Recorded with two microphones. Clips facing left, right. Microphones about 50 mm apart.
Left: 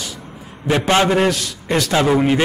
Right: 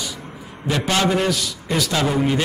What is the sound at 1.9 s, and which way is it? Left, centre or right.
Speech, left.